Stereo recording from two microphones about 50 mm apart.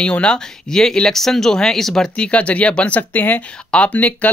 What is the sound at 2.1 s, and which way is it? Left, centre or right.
Speech, left.